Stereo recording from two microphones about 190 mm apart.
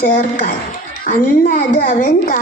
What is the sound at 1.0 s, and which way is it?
Speech, 45° left (ahead or behind).